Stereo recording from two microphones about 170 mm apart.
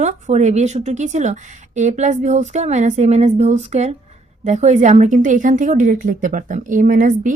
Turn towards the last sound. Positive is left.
turn(degrees=-50)  # may be behind; listen again after turning